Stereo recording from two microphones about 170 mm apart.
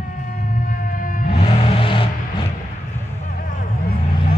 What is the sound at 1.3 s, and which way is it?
Music, 35° left (ahead or behind).